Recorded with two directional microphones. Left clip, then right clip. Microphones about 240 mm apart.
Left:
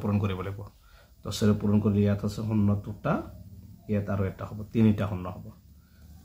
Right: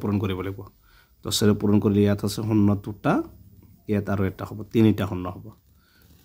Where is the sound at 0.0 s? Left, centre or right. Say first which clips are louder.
Right 4 dB; right.